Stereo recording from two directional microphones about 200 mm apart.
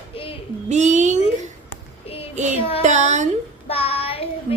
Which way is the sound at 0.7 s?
35° right (ahead or behind).